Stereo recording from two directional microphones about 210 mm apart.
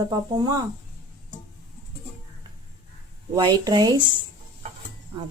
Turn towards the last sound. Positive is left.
turn(degrees=-20)  # may be behind; listen again after turning